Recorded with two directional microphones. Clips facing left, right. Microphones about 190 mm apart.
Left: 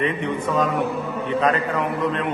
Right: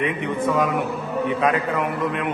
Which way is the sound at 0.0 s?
15° right (ahead or behind).